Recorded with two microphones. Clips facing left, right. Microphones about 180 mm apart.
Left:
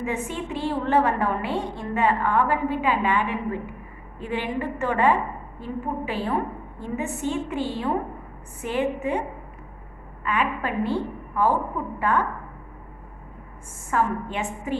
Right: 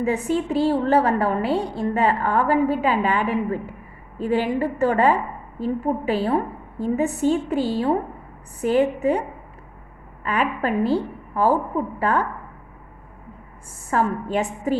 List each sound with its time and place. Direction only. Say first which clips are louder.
0.0 s a woman's voice: right 7 dB; 35° right (ahead or behind)
10.2 s a woman's voice: right 3 dB; 40° right (ahead or behind)
13.9 s a woman's voice: right 3 dB; 40° right (ahead or behind)